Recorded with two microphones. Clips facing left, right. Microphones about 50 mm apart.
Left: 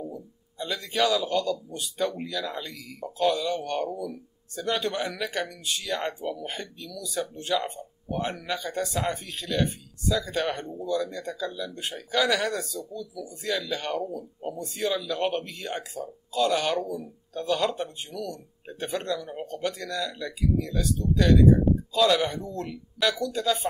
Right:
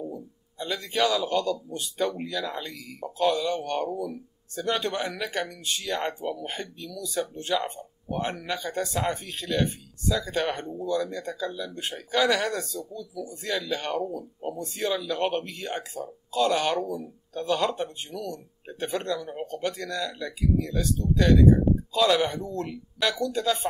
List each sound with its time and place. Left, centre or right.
0.1 s a man's voice: centre